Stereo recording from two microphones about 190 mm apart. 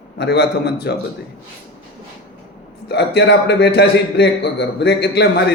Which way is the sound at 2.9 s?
65° left (ahead or behind).